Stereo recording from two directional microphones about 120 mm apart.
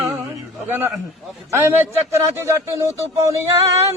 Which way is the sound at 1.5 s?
20° right (ahead or behind).